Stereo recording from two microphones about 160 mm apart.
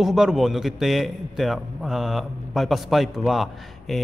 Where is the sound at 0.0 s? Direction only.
5° right (ahead or behind).